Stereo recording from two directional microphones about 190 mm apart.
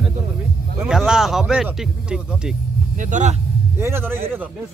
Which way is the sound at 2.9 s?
40° right (ahead or behind).